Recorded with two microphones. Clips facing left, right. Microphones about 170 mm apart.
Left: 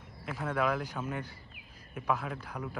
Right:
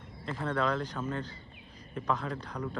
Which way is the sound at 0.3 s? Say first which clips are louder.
Even; 5° left (ahead or behind).